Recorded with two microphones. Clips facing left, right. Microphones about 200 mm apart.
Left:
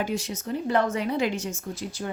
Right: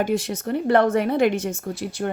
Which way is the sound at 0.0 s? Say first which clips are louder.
Right 6 dB; 60° right (ahead or behind).